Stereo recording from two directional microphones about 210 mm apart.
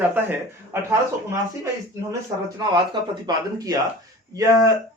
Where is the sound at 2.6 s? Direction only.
20° right (ahead or behind).